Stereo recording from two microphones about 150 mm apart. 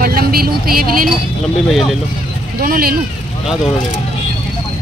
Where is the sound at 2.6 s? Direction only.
70° right (ahead or behind).